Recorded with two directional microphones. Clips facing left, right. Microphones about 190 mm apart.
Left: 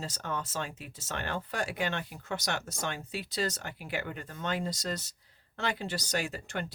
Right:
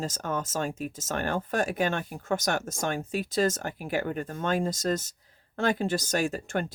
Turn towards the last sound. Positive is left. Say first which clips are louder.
# right 7 dB
turn(degrees=-50)  # may be behind; listen again after turning